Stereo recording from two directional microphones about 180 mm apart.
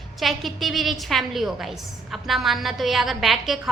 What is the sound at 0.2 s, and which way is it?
A woman's voice, centre (ahead or behind).